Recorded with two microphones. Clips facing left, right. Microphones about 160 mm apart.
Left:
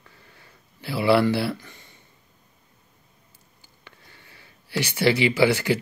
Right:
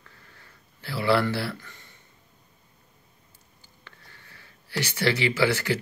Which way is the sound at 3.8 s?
15° left (ahead or behind).